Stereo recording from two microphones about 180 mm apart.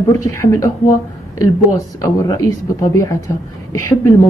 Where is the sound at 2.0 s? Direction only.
20° left (ahead or behind).